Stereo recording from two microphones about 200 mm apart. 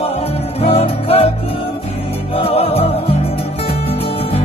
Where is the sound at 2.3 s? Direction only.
30° left (ahead or behind).